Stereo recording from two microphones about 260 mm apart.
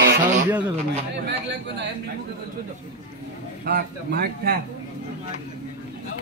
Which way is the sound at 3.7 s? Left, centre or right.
Right.